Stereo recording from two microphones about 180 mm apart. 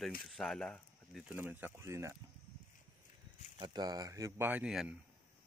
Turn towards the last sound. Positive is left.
turn(degrees=-5)  # may be behind; listen again after turning